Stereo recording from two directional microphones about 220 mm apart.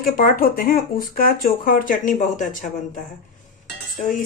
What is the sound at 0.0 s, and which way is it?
Speech, 40° left (ahead or behind).